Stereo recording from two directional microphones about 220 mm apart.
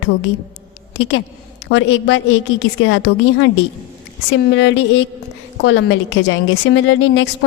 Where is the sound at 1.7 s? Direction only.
60° left (ahead or behind).